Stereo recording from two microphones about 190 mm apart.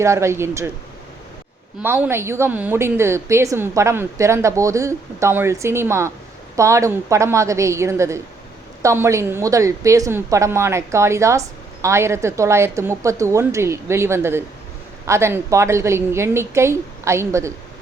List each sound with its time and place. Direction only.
0.0 s a woman's voice: 15° right (ahead or behind)
1.8 s a woman's voice: 10° right (ahead or behind)